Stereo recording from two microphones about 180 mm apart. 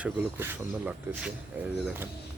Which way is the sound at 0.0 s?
10° right (ahead or behind).